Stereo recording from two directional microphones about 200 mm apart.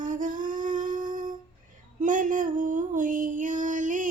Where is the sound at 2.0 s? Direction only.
40° right (ahead or behind).